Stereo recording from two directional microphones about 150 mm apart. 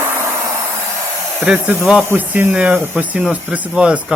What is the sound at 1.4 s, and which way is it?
Speech, 5° right (ahead or behind).